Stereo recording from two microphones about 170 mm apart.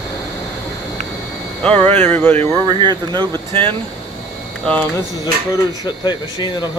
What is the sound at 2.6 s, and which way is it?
Speech, 25° right (ahead or behind).